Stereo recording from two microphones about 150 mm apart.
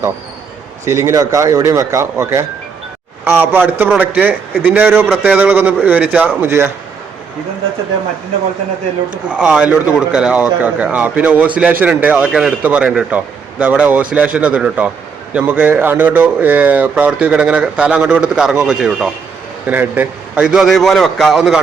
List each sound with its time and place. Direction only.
0.9 s speech: 20° right (ahead or behind)
9.3 s a man's voice: 5° right (ahead or behind)